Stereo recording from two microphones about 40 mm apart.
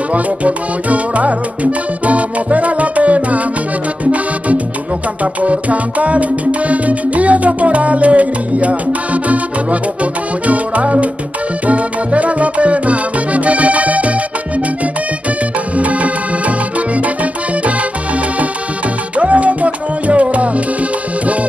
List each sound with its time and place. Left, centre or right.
0.1 s music: right
15.8 s music: right
19.1 s music: right